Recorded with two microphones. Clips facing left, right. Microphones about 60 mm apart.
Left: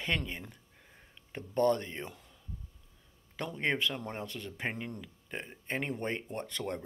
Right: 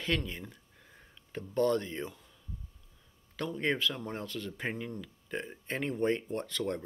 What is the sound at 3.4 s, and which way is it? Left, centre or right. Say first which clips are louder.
Speech: right 1 dB; left.